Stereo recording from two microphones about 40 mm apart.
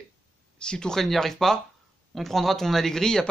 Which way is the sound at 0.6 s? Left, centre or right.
Left.